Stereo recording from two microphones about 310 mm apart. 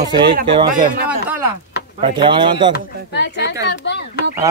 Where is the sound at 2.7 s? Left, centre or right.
Left.